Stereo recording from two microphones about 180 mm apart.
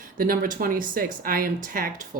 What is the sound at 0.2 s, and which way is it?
Speech, 50° right (ahead or behind).